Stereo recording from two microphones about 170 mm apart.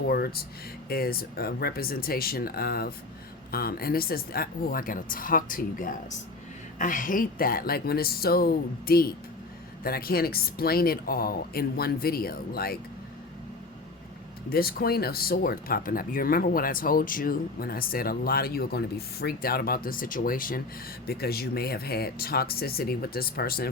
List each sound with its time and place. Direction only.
0.1 s speech: 65° left (ahead or behind)
14.5 s speech: 60° left (ahead or behind)